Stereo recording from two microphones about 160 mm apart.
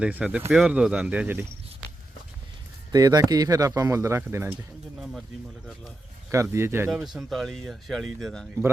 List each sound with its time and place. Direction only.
0.0 s speech: 5° right (ahead or behind)
2.9 s speech: 25° right (ahead or behind)
4.9 s speech: centre (ahead or behind)
6.3 s speech: 20° right (ahead or behind)
6.9 s speech: centre (ahead or behind)